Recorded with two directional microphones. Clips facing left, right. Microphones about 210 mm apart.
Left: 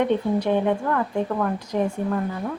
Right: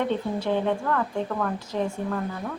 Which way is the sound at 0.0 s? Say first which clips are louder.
Left 5 dB; 15° left (ahead or behind).